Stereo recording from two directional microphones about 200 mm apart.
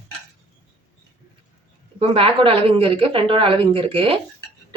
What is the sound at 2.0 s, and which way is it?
A woman's voice, 25° right (ahead or behind).